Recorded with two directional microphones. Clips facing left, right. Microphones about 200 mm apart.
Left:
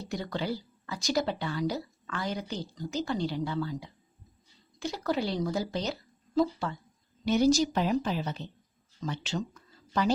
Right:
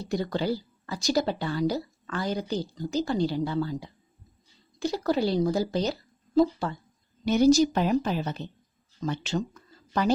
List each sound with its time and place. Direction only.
0.1 s speech: 35° right (ahead or behind)
7.3 s a woman's voice: 45° right (ahead or behind)